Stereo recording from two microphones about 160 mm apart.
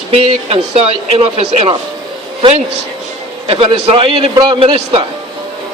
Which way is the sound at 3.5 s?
35° right (ahead or behind).